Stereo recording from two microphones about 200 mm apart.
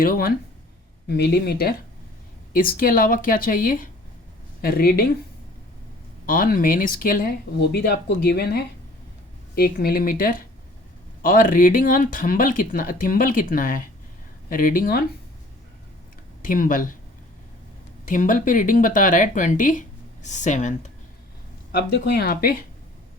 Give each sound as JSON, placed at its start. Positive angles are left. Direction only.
{"t": 0.0, "sound": "speech", "side_deg": 50}
{"t": 6.2, "sound": "speech", "side_deg": 45}
{"t": 16.4, "sound": "speech", "side_deg": 45}
{"t": 18.0, "sound": "speech", "side_deg": 40}
{"t": 21.7, "sound": "speech", "side_deg": 55}